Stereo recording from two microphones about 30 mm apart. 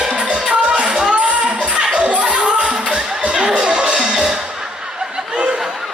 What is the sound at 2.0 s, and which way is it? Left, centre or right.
Music, right.